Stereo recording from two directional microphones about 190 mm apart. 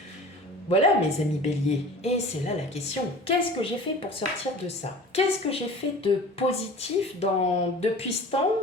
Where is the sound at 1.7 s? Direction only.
35° left (ahead or behind).